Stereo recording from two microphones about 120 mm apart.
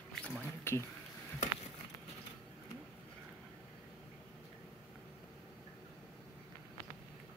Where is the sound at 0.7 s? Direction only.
20° left (ahead or behind).